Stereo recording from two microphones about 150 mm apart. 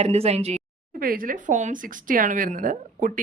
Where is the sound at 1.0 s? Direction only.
70° right (ahead or behind).